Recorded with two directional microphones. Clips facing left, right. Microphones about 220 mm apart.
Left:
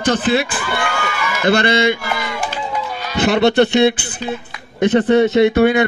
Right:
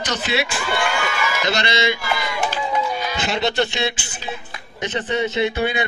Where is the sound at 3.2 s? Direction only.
60° left (ahead or behind).